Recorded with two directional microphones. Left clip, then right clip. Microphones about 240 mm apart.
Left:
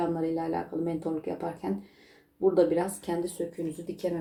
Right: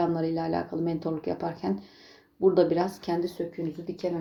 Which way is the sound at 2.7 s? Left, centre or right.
Right.